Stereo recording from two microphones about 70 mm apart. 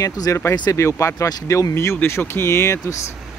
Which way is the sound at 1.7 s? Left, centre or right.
Left.